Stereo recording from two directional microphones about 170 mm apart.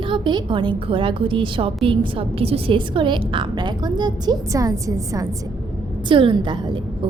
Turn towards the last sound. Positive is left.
turn(degrees=-30)  # may be behind; listen again after turning